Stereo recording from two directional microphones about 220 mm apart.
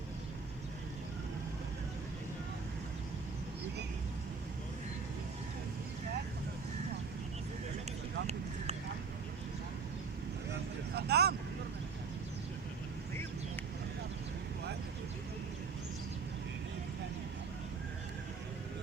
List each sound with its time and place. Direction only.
10.5 s vehicle: 45° right (ahead or behind)